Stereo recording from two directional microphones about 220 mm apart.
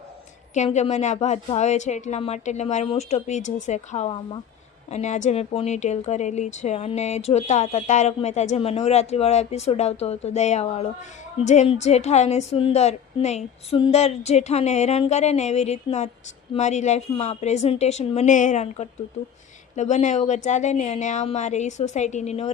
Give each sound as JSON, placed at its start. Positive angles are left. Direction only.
{"t": 0.5, "sound": "a woman's voice", "side_deg": 30}